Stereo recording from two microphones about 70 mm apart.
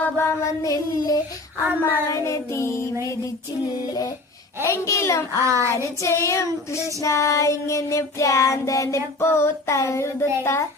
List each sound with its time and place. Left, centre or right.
0.2 s child singing: left
1.8 s child singing: left
4.6 s child singing: left
5.4 s child singing: right
6.0 s child singing: left
9.2 s child singing: left
10.4 s a child's voice: left